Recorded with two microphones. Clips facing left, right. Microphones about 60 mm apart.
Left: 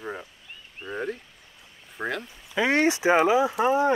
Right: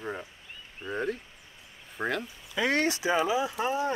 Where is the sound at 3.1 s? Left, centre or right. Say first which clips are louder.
Left 7 dB; left.